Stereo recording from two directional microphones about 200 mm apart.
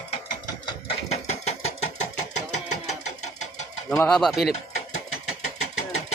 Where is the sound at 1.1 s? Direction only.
30° left (ahead or behind).